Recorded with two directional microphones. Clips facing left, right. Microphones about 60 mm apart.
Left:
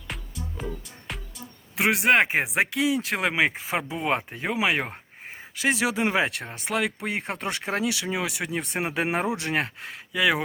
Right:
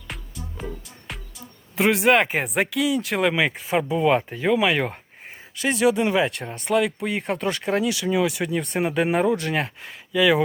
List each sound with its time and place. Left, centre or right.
0.1 s music: centre
1.7 s speech: centre; by 6.3 s left
6.4 s speech: centre
6.8 s speech: left; by 8.6 s centre
8.8 s speech: left
9.6 s speech: centre